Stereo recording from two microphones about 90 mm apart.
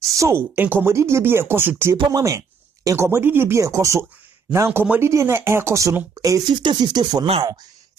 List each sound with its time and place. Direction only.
0.1 s speech: 30° right (ahead or behind)
2.0 s speech: 40° right (ahead or behind)
3.6 s speech: 35° right (ahead or behind)
4.5 s speech: 25° right (ahead or behind)
6.5 s speech: 55° right (ahead or behind)